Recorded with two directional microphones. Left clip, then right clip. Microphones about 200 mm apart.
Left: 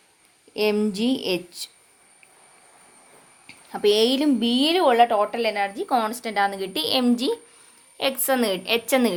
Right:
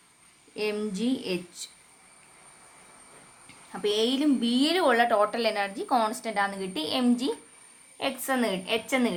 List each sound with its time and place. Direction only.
0.5 s speech: 40° left (ahead or behind)
3.7 s speech: 40° left (ahead or behind)
4.8 s a woman's voice: 15° left (ahead or behind); by 9.1 s 35° left (ahead or behind)